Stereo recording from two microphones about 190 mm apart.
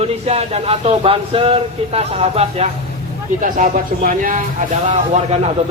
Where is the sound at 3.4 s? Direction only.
45° right (ahead or behind).